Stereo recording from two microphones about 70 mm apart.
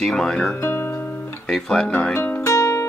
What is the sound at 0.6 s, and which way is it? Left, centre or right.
Music, left.